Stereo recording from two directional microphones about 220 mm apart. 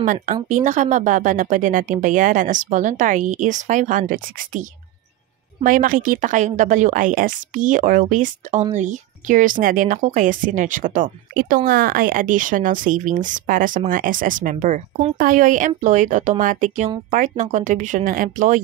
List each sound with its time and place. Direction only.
0.0 s a woman's voice: 35° right (ahead or behind)